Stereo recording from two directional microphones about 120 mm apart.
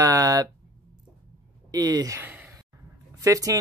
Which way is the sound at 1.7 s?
30° right (ahead or behind).